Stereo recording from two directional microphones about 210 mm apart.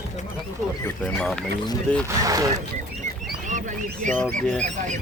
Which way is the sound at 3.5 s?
35° right (ahead or behind).